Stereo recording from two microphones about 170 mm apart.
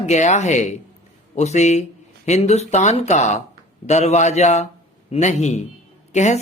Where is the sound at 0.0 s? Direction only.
40° left (ahead or behind).